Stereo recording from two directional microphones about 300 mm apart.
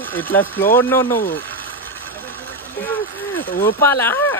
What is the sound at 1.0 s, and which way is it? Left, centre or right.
Speech, left.